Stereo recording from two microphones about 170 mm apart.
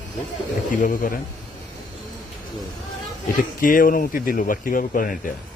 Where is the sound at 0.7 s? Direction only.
50° left (ahead or behind).